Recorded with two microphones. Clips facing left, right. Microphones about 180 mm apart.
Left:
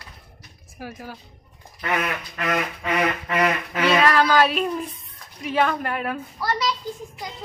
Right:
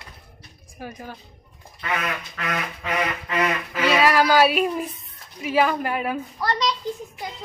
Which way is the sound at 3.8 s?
10° right (ahead or behind).